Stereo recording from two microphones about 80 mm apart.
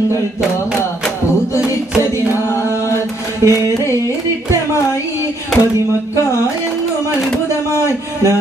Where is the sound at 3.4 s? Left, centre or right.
Right.